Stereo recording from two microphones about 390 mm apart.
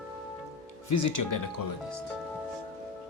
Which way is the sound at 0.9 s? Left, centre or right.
Left.